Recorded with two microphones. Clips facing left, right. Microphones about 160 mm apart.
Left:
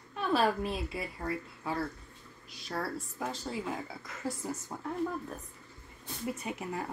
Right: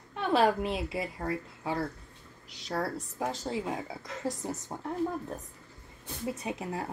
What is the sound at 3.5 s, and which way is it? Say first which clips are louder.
A woman's voice: right 3 dB; 25° right (ahead or behind).